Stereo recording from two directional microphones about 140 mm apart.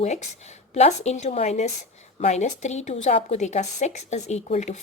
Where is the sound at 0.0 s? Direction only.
55° left (ahead or behind).